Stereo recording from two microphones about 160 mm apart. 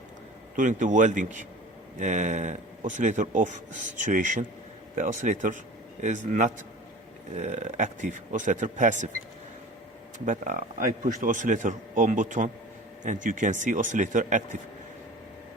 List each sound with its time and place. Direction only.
0.5 s speech: 50° right (ahead or behind)
10.2 s speech: 55° right (ahead or behind)